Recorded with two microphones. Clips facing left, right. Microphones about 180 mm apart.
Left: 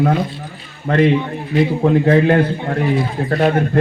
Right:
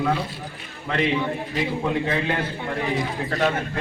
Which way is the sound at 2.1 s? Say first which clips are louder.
Left 12 dB; 50° left (ahead or behind).